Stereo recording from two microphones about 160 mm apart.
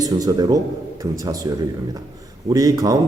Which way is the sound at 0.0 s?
25° right (ahead or behind).